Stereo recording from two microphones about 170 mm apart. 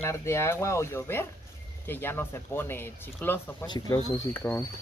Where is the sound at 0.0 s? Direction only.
15° left (ahead or behind).